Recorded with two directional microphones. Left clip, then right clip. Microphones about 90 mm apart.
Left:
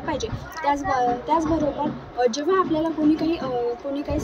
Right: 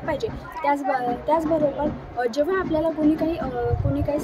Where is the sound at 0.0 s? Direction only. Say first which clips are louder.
Right 1 dB; 35° right (ahead or behind).